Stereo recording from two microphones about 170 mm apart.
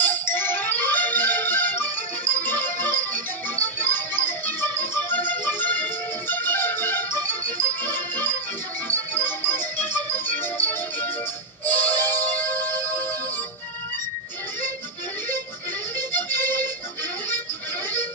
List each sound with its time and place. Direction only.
0.0 s music: 10° left (ahead or behind)
16.0 s music: 10° left (ahead or behind)